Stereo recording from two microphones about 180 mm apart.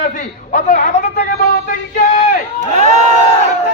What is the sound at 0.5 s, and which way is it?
Speech, 50° left (ahead or behind).